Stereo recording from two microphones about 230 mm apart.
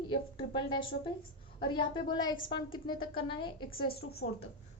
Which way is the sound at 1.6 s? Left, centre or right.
Left.